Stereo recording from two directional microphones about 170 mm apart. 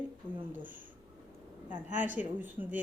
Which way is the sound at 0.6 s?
50° right (ahead or behind).